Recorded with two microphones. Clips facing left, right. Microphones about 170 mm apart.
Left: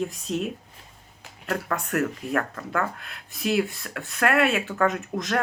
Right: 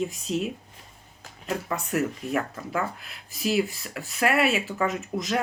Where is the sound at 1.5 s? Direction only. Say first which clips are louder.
Left 1 dB; 65° left (ahead or behind).